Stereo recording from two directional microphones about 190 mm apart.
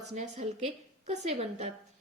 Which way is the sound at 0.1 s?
35° right (ahead or behind).